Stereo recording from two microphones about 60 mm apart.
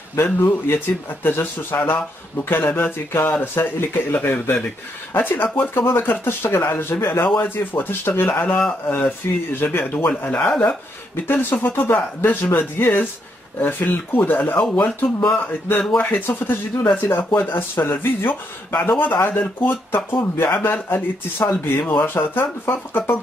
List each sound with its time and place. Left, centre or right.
0.1 s speech: left